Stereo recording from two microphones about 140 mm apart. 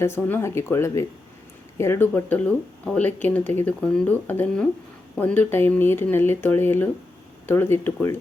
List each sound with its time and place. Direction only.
0.0 s speech: 15° left (ahead or behind)